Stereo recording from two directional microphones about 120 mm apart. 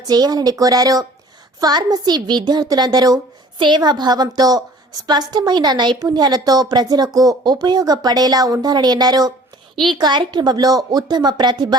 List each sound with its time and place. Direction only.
0.1 s a woman's voice: 35° right (ahead or behind)